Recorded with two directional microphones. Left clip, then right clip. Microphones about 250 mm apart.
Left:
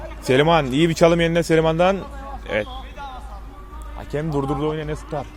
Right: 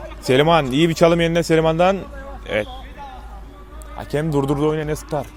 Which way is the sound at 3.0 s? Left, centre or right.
Left.